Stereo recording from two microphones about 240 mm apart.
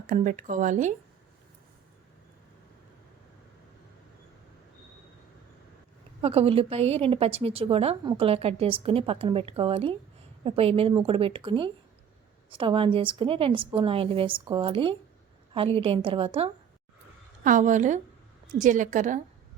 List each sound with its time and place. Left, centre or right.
0.1 s speech: right
6.2 s a woman's voice: right